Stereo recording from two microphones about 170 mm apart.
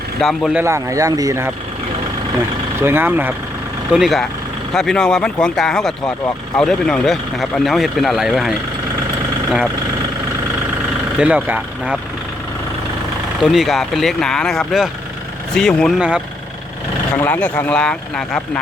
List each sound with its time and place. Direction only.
0.2 s speech: centre (ahead or behind)
0.6 s speech: 15° right (ahead or behind)
2.8 s speech: 10° right (ahead or behind)
3.9 s speech: centre (ahead or behind)
11.2 s speech: 10° right (ahead or behind)
13.4 s speech: centre (ahead or behind)
16.0 s speech: 5° right (ahead or behind)
17.2 s speech: 10° left (ahead or behind)